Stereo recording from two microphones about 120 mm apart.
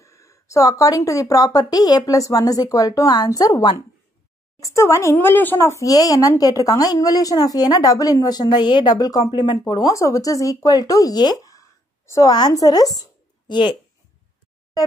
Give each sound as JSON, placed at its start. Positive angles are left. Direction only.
{"t": 0.0, "sound": "a woman's voice", "side_deg": 25}